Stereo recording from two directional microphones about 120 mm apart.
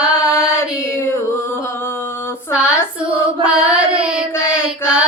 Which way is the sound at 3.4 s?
10° right (ahead or behind).